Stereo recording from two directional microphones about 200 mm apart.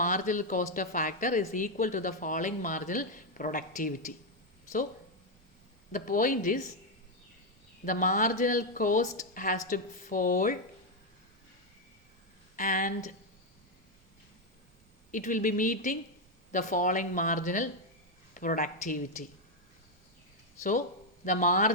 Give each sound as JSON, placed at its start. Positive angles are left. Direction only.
{"t": 0.0, "sound": "speech", "side_deg": 40}
{"t": 5.9, "sound": "speech", "side_deg": 40}
{"t": 7.9, "sound": "speech", "side_deg": 40}
{"t": 12.5, "sound": "speech", "side_deg": 45}
{"t": 15.1, "sound": "speech", "side_deg": 40}
{"t": 20.6, "sound": "speech", "side_deg": 40}